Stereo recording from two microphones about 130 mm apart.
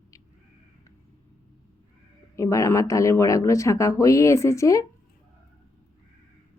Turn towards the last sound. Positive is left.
turn(degrees=25)  # may be behind; listen again after turning